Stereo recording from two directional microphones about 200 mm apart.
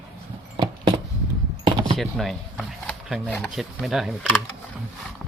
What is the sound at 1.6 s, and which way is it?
Door, 25° right (ahead or behind).